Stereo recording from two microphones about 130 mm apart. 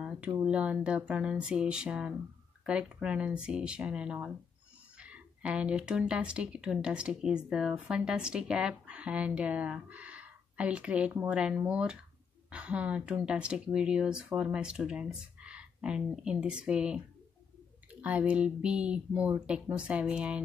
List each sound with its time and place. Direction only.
0.0 s speech: 10° right (ahead or behind)
18.0 s speech: 10° right (ahead or behind)